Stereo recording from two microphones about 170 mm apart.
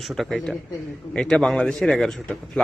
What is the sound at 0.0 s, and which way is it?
A man's voice, centre (ahead or behind).